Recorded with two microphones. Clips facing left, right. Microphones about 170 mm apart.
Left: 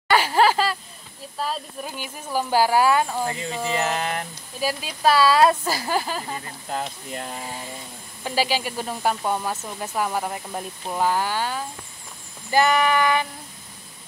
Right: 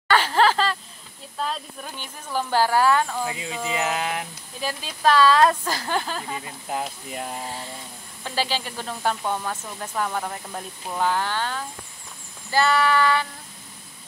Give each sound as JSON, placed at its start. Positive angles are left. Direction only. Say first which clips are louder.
{"t": 0.1, "sound": "a sound", "louder": "left 1 dB", "side_deg": 10}
{"t": 1.4, "sound": "speech", "louder": "left 1 dB", "side_deg": 5}
{"t": 3.3, "sound": "speech", "louder": "left 2 dB", "side_deg": -5}
{"t": 4.6, "sound": "speech", "louder": "left 4 dB", "side_deg": 10}
{"t": 6.3, "sound": "speech", "louder": "even", "side_deg": -5}
{"t": 8.2, "sound": "speech", "louder": "left 3 dB", "side_deg": 10}